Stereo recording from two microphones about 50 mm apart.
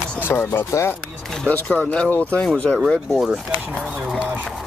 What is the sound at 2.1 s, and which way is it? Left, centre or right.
Speech, left.